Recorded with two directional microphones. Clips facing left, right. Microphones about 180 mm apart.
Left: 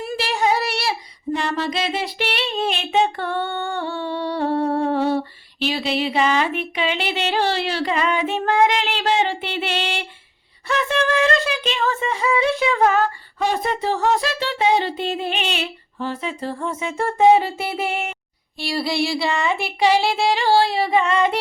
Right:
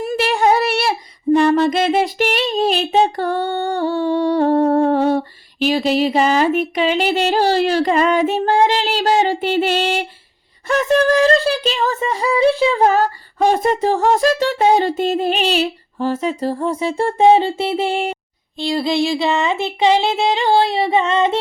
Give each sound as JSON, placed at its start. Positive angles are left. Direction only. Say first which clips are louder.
{"t": 0.0, "sound": "child singing", "louder": "right 5 dB", "side_deg": -55}
{"t": 18.5, "sound": "child singing", "louder": "right 5 dB", "side_deg": -20}